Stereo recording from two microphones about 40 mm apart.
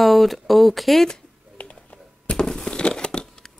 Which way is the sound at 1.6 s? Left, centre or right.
Left.